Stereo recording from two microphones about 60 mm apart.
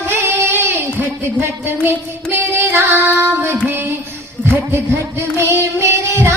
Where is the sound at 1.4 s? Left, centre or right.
Right.